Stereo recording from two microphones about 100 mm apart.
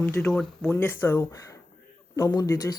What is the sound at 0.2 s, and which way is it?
Speech, 10° left (ahead or behind).